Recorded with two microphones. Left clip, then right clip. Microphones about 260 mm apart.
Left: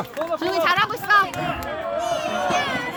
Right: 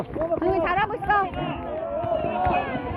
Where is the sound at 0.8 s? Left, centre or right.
Left.